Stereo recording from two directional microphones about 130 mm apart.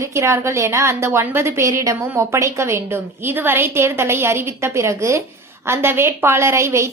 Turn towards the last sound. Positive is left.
turn(degrees=-20)  # may be behind; listen again after turning